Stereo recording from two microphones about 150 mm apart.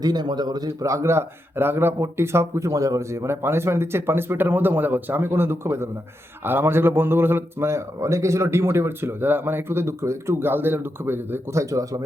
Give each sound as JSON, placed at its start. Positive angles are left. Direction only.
{"t": 0.0, "sound": "a man's voice", "side_deg": -25}